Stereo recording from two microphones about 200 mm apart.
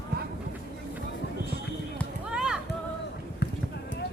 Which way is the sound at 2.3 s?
5° right (ahead or behind).